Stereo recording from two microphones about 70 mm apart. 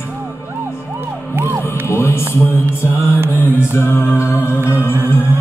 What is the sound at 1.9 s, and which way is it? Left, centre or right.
Music, left.